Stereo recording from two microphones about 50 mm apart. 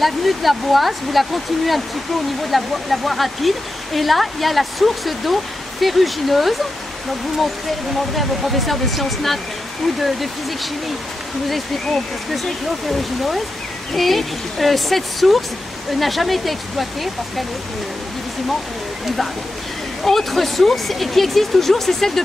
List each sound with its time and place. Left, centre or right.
0.0 s speech: centre
8.2 s speech: centre
13.9 s speech: centre
20.0 s speech: centre